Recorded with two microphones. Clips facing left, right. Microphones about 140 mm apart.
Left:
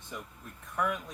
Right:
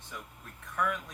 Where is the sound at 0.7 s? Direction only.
20° left (ahead or behind).